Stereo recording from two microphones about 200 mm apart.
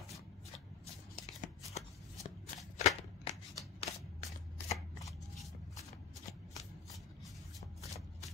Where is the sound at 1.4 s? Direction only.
35° left (ahead or behind).